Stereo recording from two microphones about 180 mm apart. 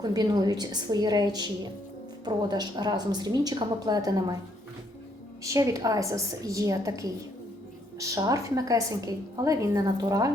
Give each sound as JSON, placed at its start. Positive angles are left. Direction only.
{"t": 0.0, "sound": "a woman's voice", "side_deg": -20}
{"t": 5.4, "sound": "a woman's voice", "side_deg": -15}